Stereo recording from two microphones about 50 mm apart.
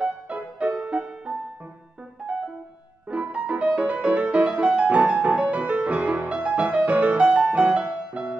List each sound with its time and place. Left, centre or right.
0.0 s music: right